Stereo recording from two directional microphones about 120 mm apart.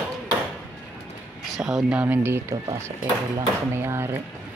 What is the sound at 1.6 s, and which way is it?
A man's voice, 5° right (ahead or behind).